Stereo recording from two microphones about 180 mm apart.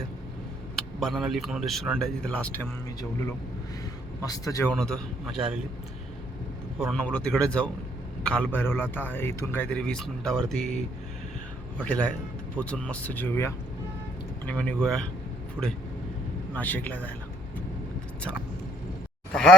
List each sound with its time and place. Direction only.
0.9 s a man's voice: centre (ahead or behind)
4.2 s speech: 20° left (ahead or behind)
4.7 s a man's voice: centre (ahead or behind)
6.7 s a man's voice: centre (ahead or behind)
11.9 s a man's voice: 10° left (ahead or behind)
15.6 s speech: 10° right (ahead or behind)
16.6 s a man's voice: 10° left (ahead or behind)
19.3 s speech: 5° left (ahead or behind)